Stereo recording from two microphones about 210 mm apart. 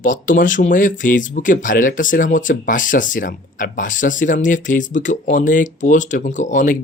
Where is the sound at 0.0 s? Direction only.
40° left (ahead or behind).